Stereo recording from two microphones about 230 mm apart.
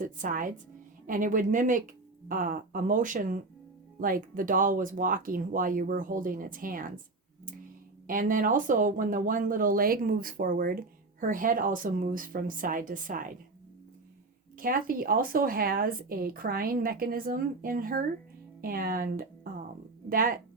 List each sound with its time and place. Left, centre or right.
0.0 s a woman's voice: right
8.0 s a woman's voice: right
14.6 s a woman's voice: right